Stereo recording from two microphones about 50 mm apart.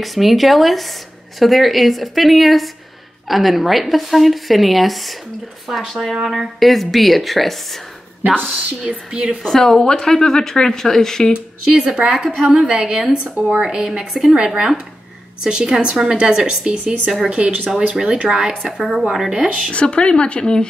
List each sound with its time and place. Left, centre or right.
0.0 s a woman's voice: centre
8.8 s a woman's voice: centre
9.4 s a woman's voice: centre
11.3 s a woman's voice: centre
12.4 s a woman's voice: right
17.3 s speech: right
17.9 s a woman's voice: centre
18.8 s a woman's voice: centre
19.7 s speech: left